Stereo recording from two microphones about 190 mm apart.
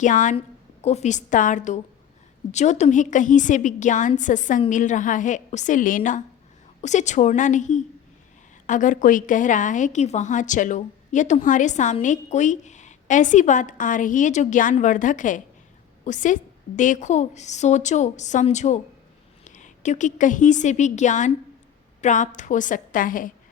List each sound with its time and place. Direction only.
0.0 s a woman's voice: 40° left (ahead or behind)